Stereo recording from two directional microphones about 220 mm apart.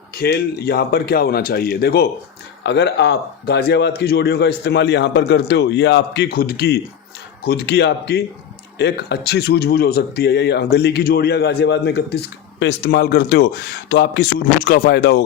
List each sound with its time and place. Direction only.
0.1 s a man's voice: 45° left (ahead or behind)